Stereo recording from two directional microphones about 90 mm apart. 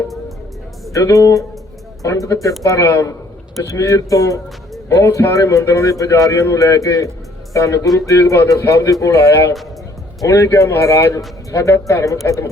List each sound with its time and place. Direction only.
0.9 s speech: 35° left (ahead or behind)